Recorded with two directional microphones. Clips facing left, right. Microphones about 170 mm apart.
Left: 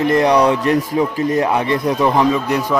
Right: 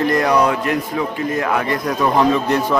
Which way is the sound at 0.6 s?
30° left (ahead or behind).